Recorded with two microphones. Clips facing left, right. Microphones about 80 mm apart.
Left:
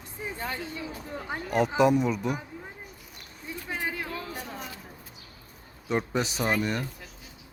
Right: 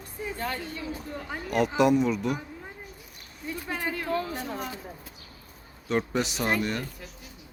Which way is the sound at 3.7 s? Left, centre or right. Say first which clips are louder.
Even; centre.